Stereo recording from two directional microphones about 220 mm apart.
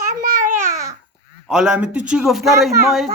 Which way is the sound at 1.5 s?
5° right (ahead or behind).